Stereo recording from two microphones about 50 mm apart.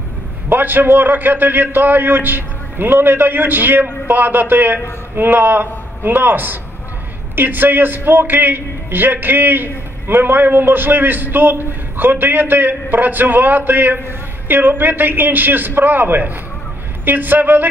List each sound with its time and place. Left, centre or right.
0.5 s a man's voice: right